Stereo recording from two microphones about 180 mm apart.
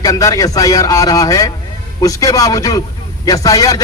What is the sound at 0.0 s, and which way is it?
A man's voice, 20° left (ahead or behind).